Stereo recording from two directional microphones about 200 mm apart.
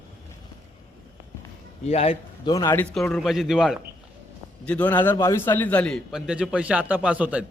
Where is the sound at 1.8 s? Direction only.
30° left (ahead or behind); by 3.8 s centre (ahead or behind).